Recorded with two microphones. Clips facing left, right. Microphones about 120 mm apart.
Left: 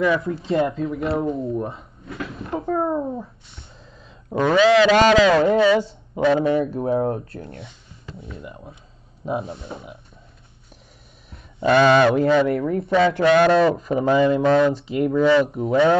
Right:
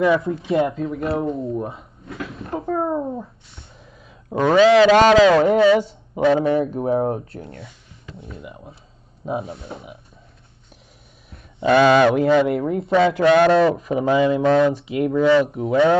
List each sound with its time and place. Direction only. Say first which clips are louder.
0.0 s speech: right 2 dB; 25° right (ahead or behind)
0.5 s speech: right 1 dB; centre (ahead or behind)
1.6 s drawer open or close: even; centre (ahead or behind)
2.5 s a sound: even; centre (ahead or behind)
4.3 s speech: right 2 dB; 45° right (ahead or behind); by 7.5 s 25° right (ahead or behind)
7.5 s a sound: even; 25° left (ahead or behind)
8.2 s speech: even; centre (ahead or behind)
11.6 s speech: right 1 dB; 5° right (ahead or behind)
12.3 s speech: right 1 dB; 20° right (ahead or behind)
13.1 s speech: right 1 dB; 15° right (ahead or behind)
13.6 s speech: right 1 dB; centre (ahead or behind)
14.4 s speech: right 1 dB; 10° left (ahead or behind)
14.7 s speech: even; centre (ahead or behind)